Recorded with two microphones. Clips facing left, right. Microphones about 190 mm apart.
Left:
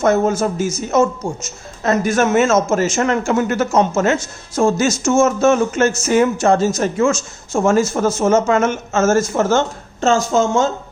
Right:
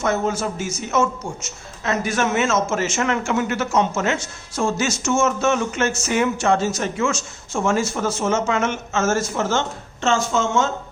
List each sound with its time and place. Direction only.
0.0 s a man's voice: 45° left (ahead or behind)